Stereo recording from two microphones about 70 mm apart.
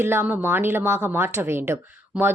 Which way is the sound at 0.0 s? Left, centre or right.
Right.